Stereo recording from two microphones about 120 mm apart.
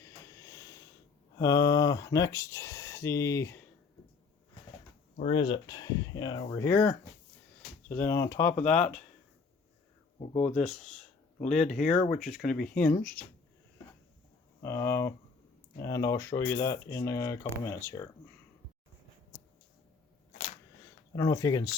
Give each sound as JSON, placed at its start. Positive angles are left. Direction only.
{"t": 0.0, "sound": "a sound", "side_deg": 30}
{"t": 1.4, "sound": "speech", "side_deg": 30}
{"t": 5.3, "sound": "speech", "side_deg": 50}
{"t": 5.6, "sound": "speech", "side_deg": 35}
{"t": 6.6, "sound": "speech", "side_deg": 15}
{"t": 10.5, "sound": "speech", "side_deg": 5}
{"t": 11.8, "sound": "speech", "side_deg": 80}
{"t": 12.1, "sound": "speech", "side_deg": 0}
{"t": 14.6, "sound": "speech", "side_deg": 20}
{"t": 21.2, "sound": "speech", "side_deg": 30}